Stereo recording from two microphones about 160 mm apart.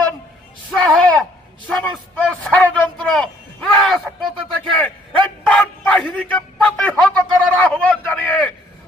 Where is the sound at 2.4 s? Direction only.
5° left (ahead or behind).